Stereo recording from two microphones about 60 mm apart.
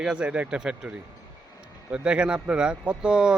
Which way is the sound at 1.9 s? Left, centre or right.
Centre.